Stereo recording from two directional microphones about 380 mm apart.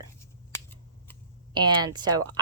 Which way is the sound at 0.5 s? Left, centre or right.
Centre.